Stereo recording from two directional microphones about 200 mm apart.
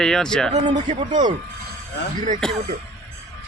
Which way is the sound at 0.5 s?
35° right (ahead or behind).